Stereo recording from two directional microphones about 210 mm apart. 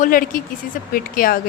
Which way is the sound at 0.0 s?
40° left (ahead or behind).